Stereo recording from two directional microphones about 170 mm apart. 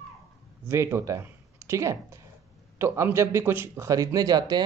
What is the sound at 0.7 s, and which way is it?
Speech, 15° right (ahead or behind).